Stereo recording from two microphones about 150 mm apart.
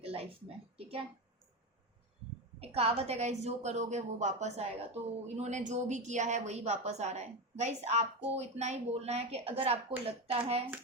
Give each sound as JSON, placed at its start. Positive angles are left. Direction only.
{"t": 0.0, "sound": "speech", "side_deg": -40}
{"t": 2.6, "sound": "a woman's voice", "side_deg": -40}